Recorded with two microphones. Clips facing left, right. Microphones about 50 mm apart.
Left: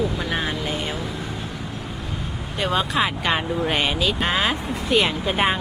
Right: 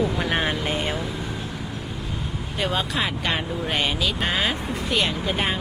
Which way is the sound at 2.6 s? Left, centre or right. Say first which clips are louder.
Left 4 dB; centre.